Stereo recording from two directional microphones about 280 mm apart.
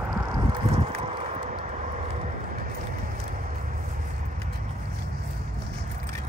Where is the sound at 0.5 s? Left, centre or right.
Centre.